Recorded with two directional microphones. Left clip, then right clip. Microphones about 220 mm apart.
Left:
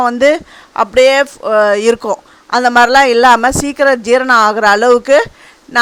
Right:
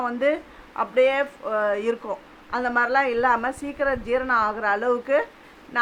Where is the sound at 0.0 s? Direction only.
45° left (ahead or behind).